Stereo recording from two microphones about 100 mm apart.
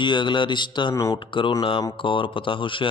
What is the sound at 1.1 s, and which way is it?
Speech, 55° left (ahead or behind).